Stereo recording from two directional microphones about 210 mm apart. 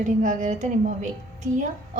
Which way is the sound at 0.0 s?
35° right (ahead or behind).